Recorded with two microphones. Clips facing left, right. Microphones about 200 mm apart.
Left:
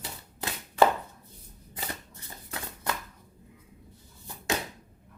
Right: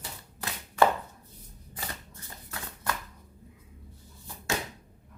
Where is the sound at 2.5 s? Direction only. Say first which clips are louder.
Left 1 dB; 20° left (ahead or behind).